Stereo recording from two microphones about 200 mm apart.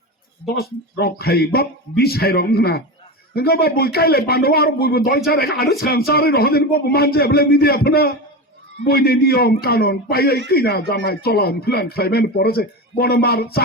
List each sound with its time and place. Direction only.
0.6 s speech: 50° left (ahead or behind)